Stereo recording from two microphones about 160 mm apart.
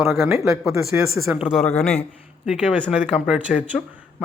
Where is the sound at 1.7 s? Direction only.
10° left (ahead or behind).